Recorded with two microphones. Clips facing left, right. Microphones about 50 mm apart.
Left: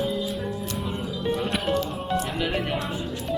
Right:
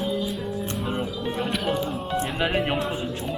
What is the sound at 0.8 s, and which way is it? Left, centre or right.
Music, centre.